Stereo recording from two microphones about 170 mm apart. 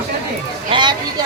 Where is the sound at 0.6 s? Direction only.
30° right (ahead or behind).